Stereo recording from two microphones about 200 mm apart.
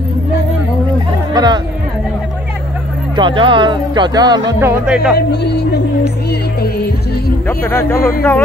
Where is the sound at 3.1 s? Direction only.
25° right (ahead or behind); by 5.1 s 5° right (ahead or behind).